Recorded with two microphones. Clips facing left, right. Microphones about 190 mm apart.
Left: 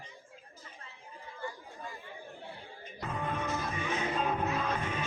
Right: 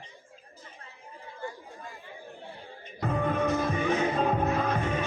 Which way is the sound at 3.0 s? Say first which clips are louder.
Right 8 dB; 60° right (ahead or behind).